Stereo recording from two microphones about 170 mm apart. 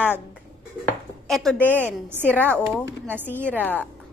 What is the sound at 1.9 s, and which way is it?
Speech, 10° right (ahead or behind).